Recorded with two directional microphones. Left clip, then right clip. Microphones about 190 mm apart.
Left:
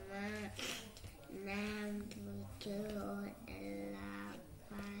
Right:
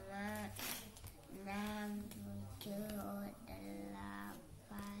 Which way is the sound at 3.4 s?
15° right (ahead or behind).